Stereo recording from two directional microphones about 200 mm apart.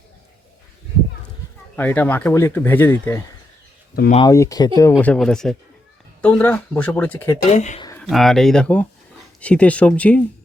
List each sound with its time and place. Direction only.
1.7 s speech: 10° left (ahead or behind)
4.3 s speech: 15° left (ahead or behind)
7.5 s speech: 35° left (ahead or behind)
7.9 s speech: centre (ahead or behind)